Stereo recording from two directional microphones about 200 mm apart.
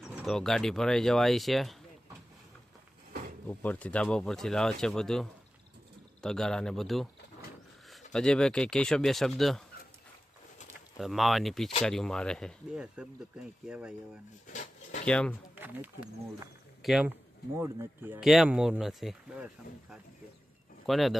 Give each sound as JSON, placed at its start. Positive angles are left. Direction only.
{"t": 0.3, "sound": "speech", "side_deg": 0}
{"t": 3.1, "sound": "a sound", "side_deg": -50}
{"t": 3.4, "sound": "speech", "side_deg": 10}
{"t": 10.9, "sound": "speech", "side_deg": 0}
{"t": 15.0, "sound": "speech", "side_deg": 5}
{"t": 15.5, "sound": "speech", "side_deg": -10}
{"t": 17.5, "sound": "speech", "side_deg": -15}
{"t": 20.8, "sound": "speech", "side_deg": 0}